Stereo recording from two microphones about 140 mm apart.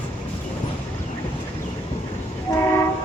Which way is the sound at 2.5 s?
20° left (ahead or behind).